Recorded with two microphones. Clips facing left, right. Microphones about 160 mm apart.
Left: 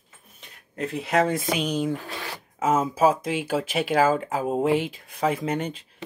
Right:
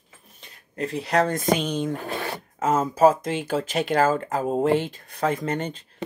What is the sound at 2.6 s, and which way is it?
Speech, 10° left (ahead or behind).